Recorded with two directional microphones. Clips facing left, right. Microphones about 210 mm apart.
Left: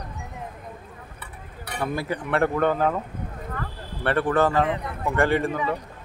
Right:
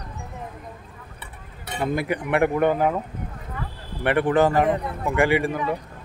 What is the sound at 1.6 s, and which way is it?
Speech, 20° right (ahead or behind).